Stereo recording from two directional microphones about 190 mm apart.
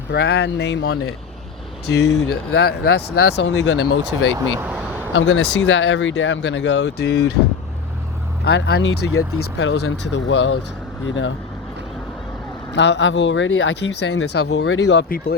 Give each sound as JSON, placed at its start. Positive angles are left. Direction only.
{"t": 0.1, "sound": "speech", "side_deg": 65}
{"t": 4.4, "sound": "speech", "side_deg": -25}
{"t": 4.6, "sound": "a sound", "side_deg": -10}
{"t": 5.1, "sound": "speech", "side_deg": 75}
{"t": 8.4, "sound": "speech", "side_deg": 60}
{"t": 11.0, "sound": "speech", "side_deg": 85}
{"t": 12.7, "sound": "speech", "side_deg": 70}